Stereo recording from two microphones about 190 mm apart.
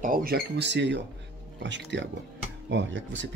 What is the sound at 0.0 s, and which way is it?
Speech, 50° right (ahead or behind).